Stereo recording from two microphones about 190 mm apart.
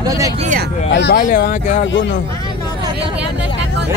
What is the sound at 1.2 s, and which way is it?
Speech, 45° left (ahead or behind).